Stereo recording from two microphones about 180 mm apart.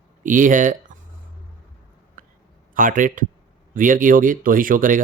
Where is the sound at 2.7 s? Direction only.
50° right (ahead or behind).